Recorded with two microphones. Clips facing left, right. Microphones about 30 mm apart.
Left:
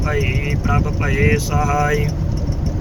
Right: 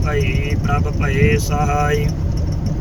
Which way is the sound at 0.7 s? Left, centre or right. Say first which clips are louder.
Even; centre.